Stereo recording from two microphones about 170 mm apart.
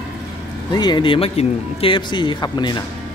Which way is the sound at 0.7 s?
25° left (ahead or behind).